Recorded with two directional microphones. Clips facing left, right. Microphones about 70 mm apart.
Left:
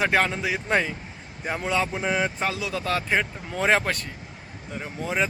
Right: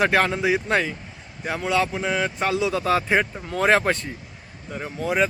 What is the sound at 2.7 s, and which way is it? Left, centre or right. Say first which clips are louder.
Speech: right 4 dB; centre.